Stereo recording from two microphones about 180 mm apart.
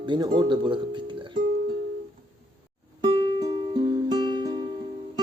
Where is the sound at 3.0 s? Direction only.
25° right (ahead or behind).